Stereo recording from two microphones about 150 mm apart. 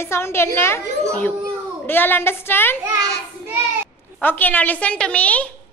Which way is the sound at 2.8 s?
15° right (ahead or behind).